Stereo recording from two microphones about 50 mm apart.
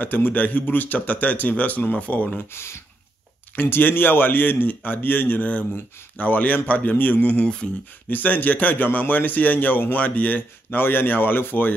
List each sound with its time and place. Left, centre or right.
0.0 s a man's voice: left
2.3 s speech: left
3.6 s a man's voice: left